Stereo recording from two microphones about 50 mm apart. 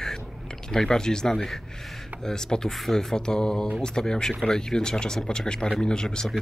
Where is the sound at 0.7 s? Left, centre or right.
Centre.